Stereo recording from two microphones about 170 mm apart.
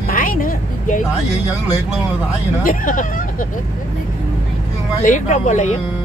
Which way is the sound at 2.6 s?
55° left (ahead or behind).